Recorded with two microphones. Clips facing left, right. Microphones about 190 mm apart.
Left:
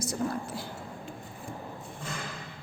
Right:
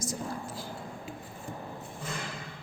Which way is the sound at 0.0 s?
65° left (ahead or behind).